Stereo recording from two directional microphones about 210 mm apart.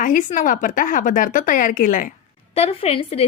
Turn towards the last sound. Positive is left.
turn(degrees=30)  # may be behind; listen again after turning